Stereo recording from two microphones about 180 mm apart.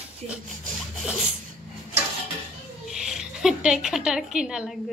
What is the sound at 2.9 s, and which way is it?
Speech, 5° right (ahead or behind).